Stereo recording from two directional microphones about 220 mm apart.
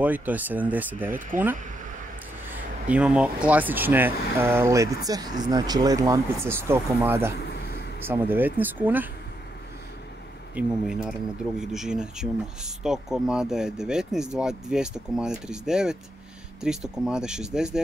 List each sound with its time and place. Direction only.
0.0 s speech: 5° right (ahead or behind)
2.9 s speech: 5° right (ahead or behind)
7.3 s a sound: 45° left (ahead or behind)
8.1 s speech: 10° right (ahead or behind)
10.5 s speech: 5° right (ahead or behind)